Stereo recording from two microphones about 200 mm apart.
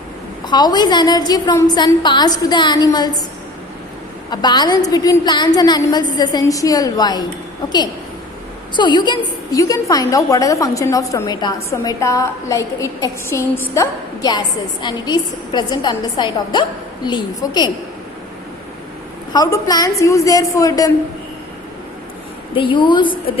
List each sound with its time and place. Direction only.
0.4 s a woman's voice: 20° left (ahead or behind)
4.3 s a woman's voice: 20° left (ahead or behind)
8.7 s a woman's voice: 20° left (ahead or behind)
19.3 s a woman's voice: 20° left (ahead or behind)
22.5 s a woman's voice: 25° left (ahead or behind)